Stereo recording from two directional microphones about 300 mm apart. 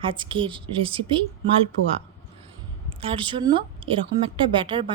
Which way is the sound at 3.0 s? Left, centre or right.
Centre.